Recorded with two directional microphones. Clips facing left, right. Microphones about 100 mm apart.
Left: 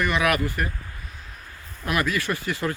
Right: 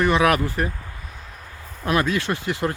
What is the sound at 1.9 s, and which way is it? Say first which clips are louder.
Speech: right 3 dB; 25° right (ahead or behind).